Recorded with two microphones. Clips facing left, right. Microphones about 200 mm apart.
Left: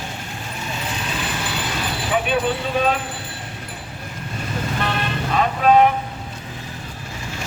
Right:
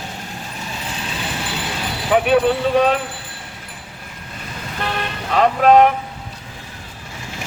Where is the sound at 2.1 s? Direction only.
60° right (ahead or behind).